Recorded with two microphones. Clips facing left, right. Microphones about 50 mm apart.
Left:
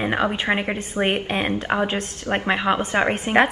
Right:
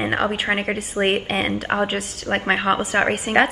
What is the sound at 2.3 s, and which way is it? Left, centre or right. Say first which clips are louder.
Speech: right 1 dB; right.